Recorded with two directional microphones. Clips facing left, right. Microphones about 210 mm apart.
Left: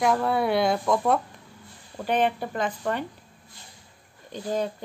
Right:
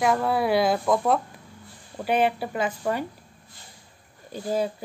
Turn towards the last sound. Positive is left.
turn(degrees=-10)  # may be behind; listen again after turning